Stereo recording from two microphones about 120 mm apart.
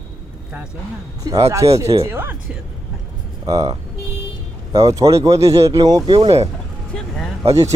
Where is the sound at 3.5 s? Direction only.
30° right (ahead or behind).